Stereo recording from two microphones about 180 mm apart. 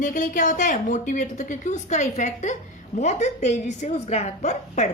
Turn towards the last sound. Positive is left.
turn(degrees=40)  # may be behind; listen again after turning